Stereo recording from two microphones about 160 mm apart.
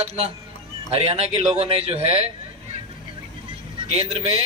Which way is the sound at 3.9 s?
40° right (ahead or behind).